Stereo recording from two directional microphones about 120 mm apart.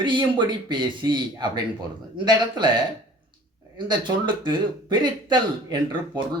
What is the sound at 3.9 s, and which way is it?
Speech, 40° right (ahead or behind).